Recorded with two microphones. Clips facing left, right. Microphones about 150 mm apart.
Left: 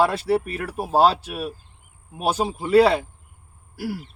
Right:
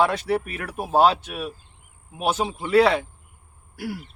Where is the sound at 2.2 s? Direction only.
35° left (ahead or behind).